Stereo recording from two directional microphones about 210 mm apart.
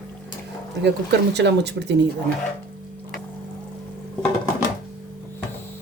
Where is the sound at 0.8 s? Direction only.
55° right (ahead or behind).